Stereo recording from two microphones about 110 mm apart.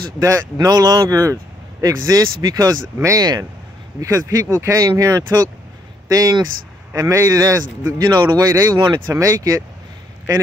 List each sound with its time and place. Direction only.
0.2 s speech: 30° right (ahead or behind)
8.5 s speech: 30° right (ahead or behind)
8.7 s speech: 45° right (ahead or behind)
9.1 s speech: 30° right (ahead or behind)